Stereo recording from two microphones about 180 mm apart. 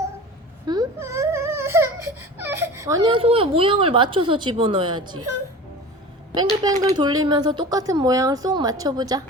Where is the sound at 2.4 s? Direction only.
15° right (ahead or behind).